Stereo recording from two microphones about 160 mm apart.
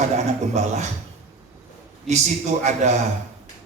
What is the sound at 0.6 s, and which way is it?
Speech, 45° right (ahead or behind).